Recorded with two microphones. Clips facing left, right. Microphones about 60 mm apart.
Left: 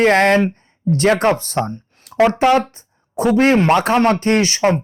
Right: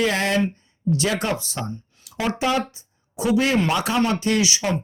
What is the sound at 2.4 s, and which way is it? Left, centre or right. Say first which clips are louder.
Speech: left 8 dB; left.